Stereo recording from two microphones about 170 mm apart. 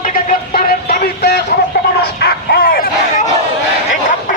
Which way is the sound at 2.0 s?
65° left (ahead or behind).